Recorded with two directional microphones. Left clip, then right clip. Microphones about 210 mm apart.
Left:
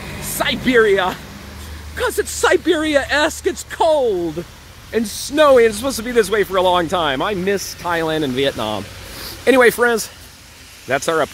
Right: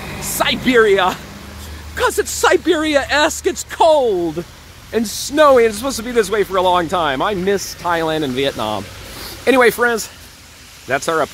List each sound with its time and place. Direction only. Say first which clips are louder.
0.0 s a sound: right 3 dB; 35° right (ahead or behind)
0.4 s a man's voice: right 1 dB; 5° right (ahead or behind)
2.3 s a man's voice: even; centre (ahead or behind)